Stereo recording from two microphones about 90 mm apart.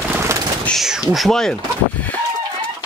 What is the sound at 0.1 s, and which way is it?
Bird, 30° right (ahead or behind).